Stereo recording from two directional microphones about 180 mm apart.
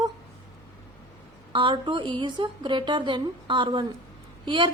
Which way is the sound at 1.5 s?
25° right (ahead or behind).